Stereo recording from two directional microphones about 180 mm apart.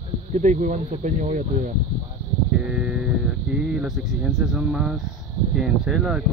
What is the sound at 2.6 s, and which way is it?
Speech, 5° right (ahead or behind).